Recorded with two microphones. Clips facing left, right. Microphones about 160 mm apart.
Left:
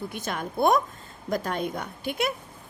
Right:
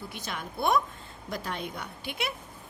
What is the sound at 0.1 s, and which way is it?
A woman's voice, 50° left (ahead or behind).